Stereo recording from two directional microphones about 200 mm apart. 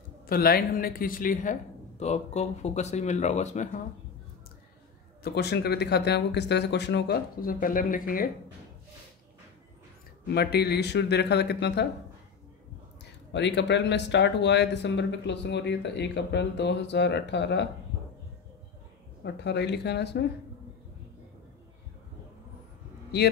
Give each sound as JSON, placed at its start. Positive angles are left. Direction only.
{"t": 0.3, "sound": "speech", "side_deg": 50}
{"t": 5.2, "sound": "speech", "side_deg": 55}
{"t": 10.2, "sound": "speech", "side_deg": 55}
{"t": 13.3, "sound": "speech", "side_deg": 60}
{"t": 19.2, "sound": "speech", "side_deg": 60}